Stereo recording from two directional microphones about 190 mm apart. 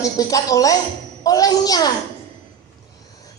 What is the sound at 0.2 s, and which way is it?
A man's voice, 20° left (ahead or behind).